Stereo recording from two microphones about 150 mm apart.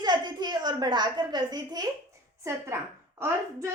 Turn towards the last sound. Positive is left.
turn(degrees=-20)  # may be behind; listen again after turning